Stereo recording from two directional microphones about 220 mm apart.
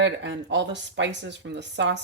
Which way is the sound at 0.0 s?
55° right (ahead or behind).